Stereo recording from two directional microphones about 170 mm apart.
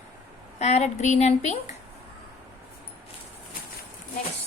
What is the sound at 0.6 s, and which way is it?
Speech, 40° left (ahead or behind).